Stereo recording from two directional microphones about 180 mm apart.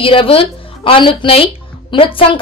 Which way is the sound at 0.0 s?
30° left (ahead or behind).